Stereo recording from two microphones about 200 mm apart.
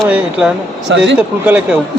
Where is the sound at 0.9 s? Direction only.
65° right (ahead or behind).